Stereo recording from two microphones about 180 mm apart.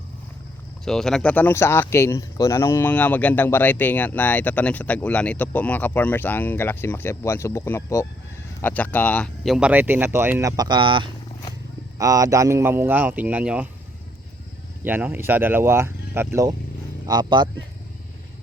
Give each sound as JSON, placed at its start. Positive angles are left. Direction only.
{"t": 0.9, "sound": "speech", "side_deg": 0}
{"t": 14.8, "sound": "speech", "side_deg": -10}